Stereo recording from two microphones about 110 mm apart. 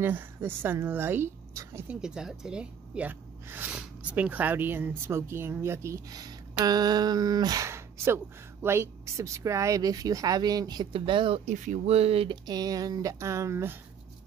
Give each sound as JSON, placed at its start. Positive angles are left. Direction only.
{"t": 0.0, "sound": "speech", "side_deg": -20}
{"t": 1.9, "sound": "speech", "side_deg": -5}
{"t": 10.9, "sound": "speech", "side_deg": -50}
{"t": 12.4, "sound": "speech", "side_deg": -35}